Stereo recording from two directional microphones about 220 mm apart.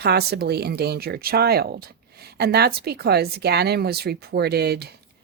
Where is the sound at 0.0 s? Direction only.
45° right (ahead or behind).